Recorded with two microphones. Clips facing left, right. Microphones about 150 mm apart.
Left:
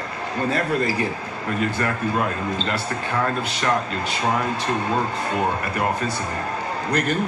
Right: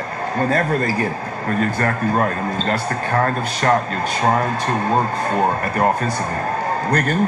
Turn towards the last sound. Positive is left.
turn(degrees=-50)  # may be behind; listen again after turning